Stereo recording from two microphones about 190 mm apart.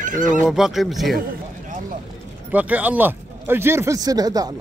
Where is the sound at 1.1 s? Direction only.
50° right (ahead or behind).